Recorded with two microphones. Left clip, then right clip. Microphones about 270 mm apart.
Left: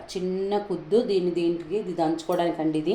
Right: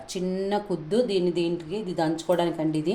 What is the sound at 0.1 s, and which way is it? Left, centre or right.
Speech, right.